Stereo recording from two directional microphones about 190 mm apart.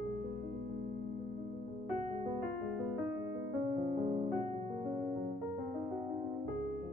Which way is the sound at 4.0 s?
35° right (ahead or behind).